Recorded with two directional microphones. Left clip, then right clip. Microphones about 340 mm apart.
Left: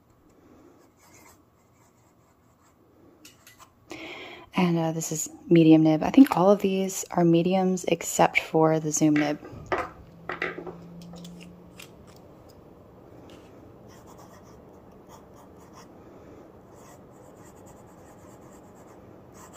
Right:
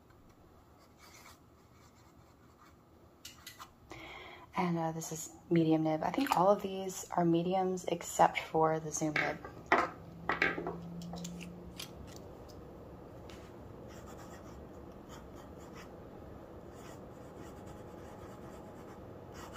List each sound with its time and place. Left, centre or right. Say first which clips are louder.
4.1 s speech: left 8 dB; left